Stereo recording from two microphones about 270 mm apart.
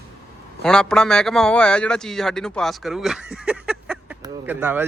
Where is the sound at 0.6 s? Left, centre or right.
Centre.